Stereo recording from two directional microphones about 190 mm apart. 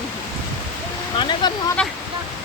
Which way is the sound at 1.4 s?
20° left (ahead or behind).